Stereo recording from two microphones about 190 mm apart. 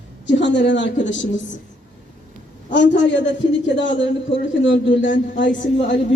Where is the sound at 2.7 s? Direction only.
70° left (ahead or behind).